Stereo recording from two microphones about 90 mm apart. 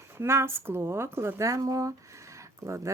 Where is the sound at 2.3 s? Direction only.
35° right (ahead or behind).